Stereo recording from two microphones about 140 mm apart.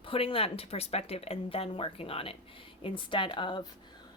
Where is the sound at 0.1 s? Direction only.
40° left (ahead or behind).